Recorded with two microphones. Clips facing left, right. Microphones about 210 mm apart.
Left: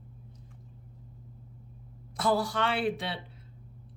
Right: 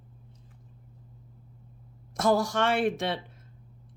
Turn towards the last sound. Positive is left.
turn(degrees=-45)  # may be behind; listen again after turning